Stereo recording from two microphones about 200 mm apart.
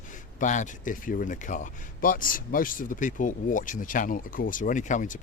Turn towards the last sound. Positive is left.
turn(degrees=40)  # may be behind; listen again after turning